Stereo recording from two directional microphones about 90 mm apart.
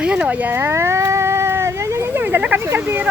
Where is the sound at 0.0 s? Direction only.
10° right (ahead or behind); by 2.2 s 30° right (ahead or behind).